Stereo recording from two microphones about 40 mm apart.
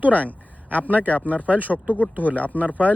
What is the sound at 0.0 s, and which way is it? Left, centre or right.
Speech, right.